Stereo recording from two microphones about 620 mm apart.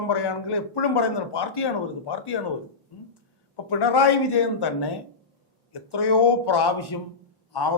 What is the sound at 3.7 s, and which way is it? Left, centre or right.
A man's voice, left.